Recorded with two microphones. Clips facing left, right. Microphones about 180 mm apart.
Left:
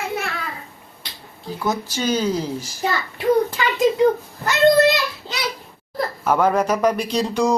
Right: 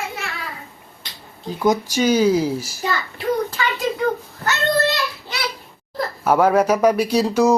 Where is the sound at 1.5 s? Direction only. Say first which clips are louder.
Right 5 dB; 15° right (ahead or behind).